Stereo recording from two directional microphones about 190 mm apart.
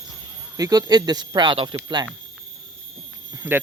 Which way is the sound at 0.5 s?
20° right (ahead or behind).